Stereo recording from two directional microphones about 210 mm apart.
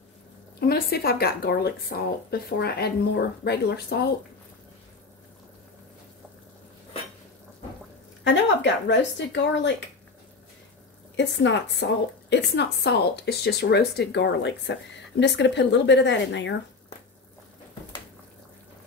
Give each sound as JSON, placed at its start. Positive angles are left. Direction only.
{"t": 0.6, "sound": "speech", "side_deg": 50}
{"t": 8.2, "sound": "a woman's voice", "side_deg": 55}
{"t": 11.1, "sound": "a woman's voice", "side_deg": 55}